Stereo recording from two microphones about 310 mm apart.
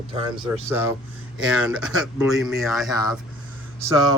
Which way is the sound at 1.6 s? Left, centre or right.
Centre.